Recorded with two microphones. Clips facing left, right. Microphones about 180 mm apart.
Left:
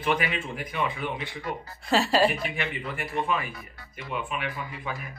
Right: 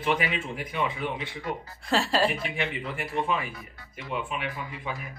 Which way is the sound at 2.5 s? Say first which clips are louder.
Right 1 dB; 25° right (ahead or behind).